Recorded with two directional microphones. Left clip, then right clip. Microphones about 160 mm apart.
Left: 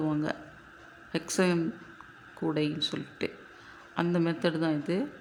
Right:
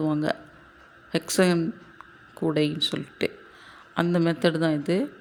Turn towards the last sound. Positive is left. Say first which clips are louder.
# right 5 dB
turn(degrees=-30)  # may be behind; listen again after turning